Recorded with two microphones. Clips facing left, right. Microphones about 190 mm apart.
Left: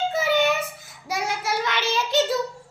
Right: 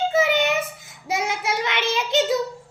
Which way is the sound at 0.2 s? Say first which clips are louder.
Even; 20° right (ahead or behind).